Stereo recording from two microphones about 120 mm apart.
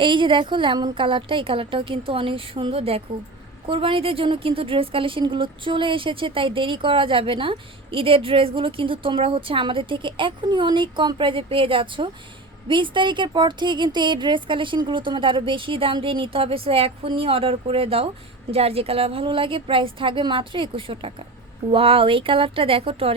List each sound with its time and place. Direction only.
0.0 s speech: 45° right (ahead or behind)